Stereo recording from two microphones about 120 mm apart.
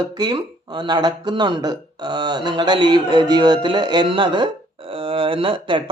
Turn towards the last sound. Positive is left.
turn(degrees=-45)  # may be behind; listen again after turning